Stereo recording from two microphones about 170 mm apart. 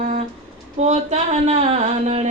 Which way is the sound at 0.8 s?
40° right (ahead or behind).